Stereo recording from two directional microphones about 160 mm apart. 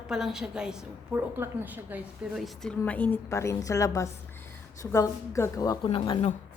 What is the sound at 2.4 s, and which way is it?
A woman's voice, centre (ahead or behind).